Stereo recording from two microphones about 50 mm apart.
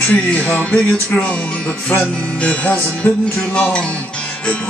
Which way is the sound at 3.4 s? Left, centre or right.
Left.